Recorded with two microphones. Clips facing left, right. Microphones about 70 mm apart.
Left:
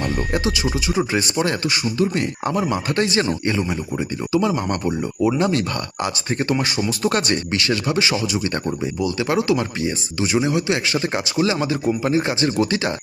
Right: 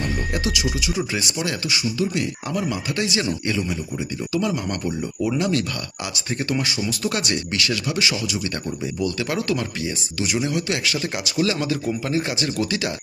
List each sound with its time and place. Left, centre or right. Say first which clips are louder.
0.3 s speech: left 3 dB; left
4.5 s speech: left 4 dB; left